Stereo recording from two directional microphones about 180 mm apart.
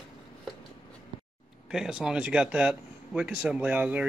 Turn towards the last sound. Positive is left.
turn(degrees=-10)  # may be behind; listen again after turning